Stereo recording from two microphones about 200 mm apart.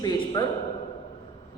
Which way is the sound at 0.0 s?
20° left (ahead or behind).